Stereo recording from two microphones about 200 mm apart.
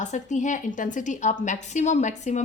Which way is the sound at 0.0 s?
35° left (ahead or behind).